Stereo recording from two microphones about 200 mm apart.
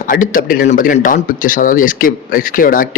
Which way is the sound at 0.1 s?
40° left (ahead or behind).